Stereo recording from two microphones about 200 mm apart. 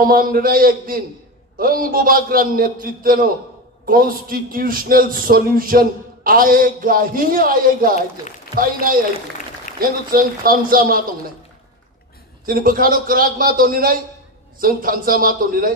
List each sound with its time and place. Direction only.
0.0 s a man's voice: 45° right (ahead or behind)
9.8 s a man's voice: 45° right (ahead or behind)
12.4 s a man's voice: 45° right (ahead or behind)